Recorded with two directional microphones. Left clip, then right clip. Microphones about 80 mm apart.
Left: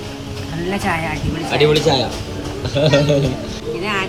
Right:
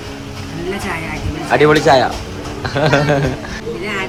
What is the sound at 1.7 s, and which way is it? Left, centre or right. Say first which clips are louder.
A man's voice: right 5 dB; right.